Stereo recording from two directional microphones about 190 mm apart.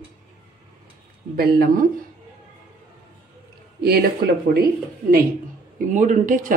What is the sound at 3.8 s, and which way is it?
Speech, 55° right (ahead or behind).